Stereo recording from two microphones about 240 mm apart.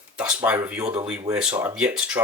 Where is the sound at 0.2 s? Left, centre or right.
Centre.